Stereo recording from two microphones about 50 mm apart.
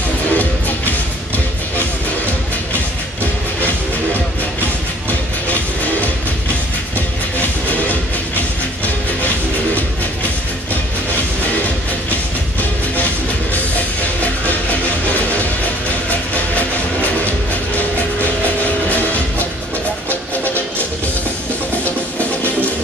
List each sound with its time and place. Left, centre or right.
0.3 s music: left